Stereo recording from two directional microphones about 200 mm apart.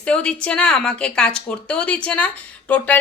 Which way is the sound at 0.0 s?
5° left (ahead or behind).